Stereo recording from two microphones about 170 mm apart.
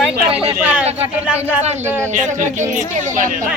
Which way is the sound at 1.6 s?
40° right (ahead or behind).